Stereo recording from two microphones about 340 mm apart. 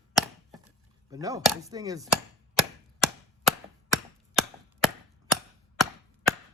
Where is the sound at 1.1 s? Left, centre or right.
Centre.